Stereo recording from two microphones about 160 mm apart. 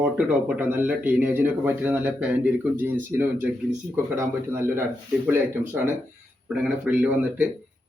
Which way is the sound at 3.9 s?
15° right (ahead or behind).